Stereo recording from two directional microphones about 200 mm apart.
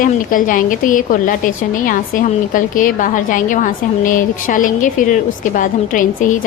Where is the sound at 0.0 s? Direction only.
40° left (ahead or behind).